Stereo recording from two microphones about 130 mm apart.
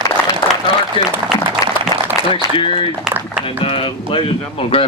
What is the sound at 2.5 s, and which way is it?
A man's voice, 45° left (ahead or behind).